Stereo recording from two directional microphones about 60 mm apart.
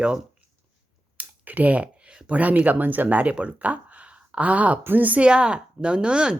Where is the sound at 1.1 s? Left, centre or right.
Right.